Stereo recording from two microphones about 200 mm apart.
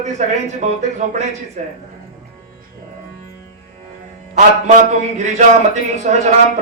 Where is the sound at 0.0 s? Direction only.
35° right (ahead or behind).